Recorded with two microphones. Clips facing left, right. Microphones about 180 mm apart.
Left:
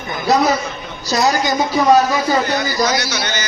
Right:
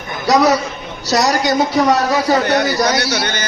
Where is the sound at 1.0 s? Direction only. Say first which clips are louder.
Right 1 dB; 75° right (ahead or behind).